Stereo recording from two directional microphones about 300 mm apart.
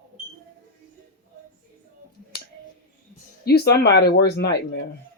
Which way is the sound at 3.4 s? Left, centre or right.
Left.